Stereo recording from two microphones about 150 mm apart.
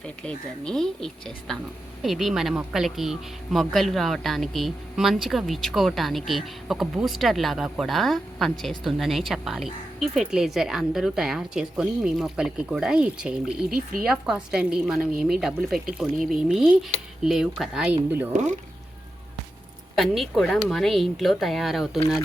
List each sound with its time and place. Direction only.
0.3 s speech: 5° left (ahead or behind)
13.7 s speech: 75° right (ahead or behind)
14.1 s speech: 5° right (ahead or behind)
20.0 s speech: centre (ahead or behind)